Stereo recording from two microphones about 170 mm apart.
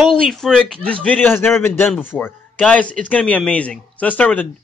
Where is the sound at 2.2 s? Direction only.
10° left (ahead or behind).